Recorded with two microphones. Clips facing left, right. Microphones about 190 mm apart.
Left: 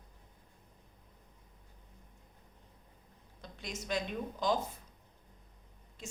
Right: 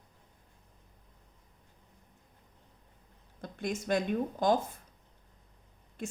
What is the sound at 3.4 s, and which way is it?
Speech, 50° right (ahead or behind).